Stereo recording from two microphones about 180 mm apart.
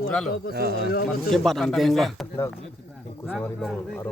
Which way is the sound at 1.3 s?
Centre (ahead or behind).